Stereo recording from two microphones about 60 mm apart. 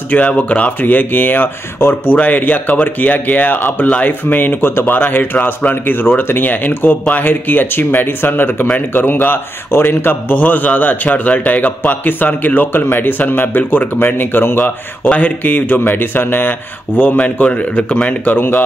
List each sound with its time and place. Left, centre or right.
0.3 s speech: left
2.1 s speech: left